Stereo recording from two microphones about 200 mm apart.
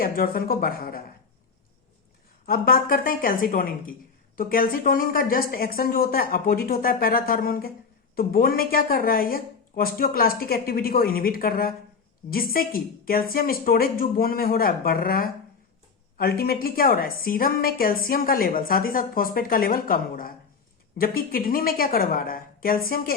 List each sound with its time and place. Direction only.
0.0 s a woman's voice: 45° left (ahead or behind)
2.5 s a woman's voice: 45° left (ahead or behind)